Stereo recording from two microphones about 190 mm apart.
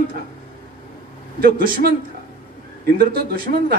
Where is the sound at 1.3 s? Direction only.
50° right (ahead or behind).